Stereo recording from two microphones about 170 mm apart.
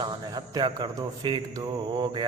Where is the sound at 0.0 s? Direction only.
25° right (ahead or behind).